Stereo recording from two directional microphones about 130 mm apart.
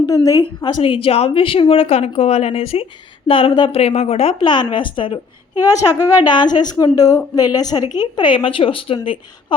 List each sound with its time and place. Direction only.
0.0 s a woman's voice: 25° left (ahead or behind); by 9.6 s 40° left (ahead or behind)